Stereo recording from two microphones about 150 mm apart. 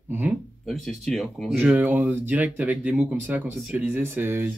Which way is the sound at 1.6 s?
10° right (ahead or behind).